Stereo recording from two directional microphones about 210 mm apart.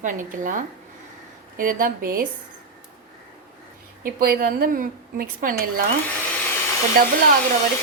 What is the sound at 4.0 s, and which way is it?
A woman's voice, 45° right (ahead or behind).